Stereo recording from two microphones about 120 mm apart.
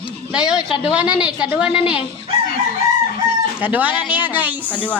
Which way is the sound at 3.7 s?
15° right (ahead or behind).